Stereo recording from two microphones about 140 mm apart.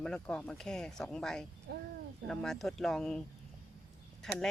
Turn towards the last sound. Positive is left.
turn(degrees=5)  # may be behind; listen again after turning